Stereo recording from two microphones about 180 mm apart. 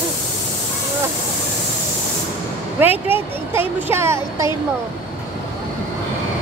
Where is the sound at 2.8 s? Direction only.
10° right (ahead or behind).